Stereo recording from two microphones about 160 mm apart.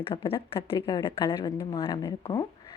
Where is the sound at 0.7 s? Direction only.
20° left (ahead or behind).